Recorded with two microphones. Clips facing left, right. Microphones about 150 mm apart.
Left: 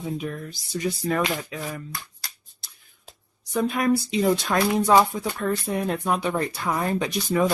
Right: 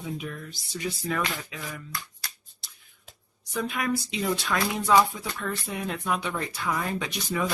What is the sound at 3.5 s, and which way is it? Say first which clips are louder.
Speech: left 6 dB; 40° left (ahead or behind).